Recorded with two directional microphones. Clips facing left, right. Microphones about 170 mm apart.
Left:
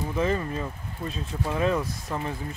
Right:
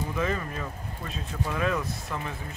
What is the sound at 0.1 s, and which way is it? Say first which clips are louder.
Speech: left 5 dB; 30° left (ahead or behind).